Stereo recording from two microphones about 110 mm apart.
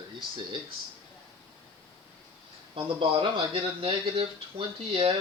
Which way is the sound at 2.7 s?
60° right (ahead or behind).